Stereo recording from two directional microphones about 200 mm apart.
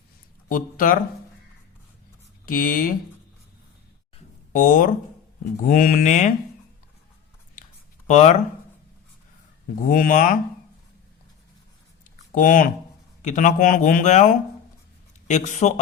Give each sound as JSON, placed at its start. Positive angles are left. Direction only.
{"t": 0.4, "sound": "speech", "side_deg": 45}
{"t": 2.5, "sound": "speech", "side_deg": 45}
{"t": 4.5, "sound": "speech", "side_deg": 45}
{"t": 8.0, "sound": "speech", "side_deg": 35}
{"t": 9.9, "sound": "speech", "side_deg": 45}
{"t": 12.3, "sound": "speech", "side_deg": 40}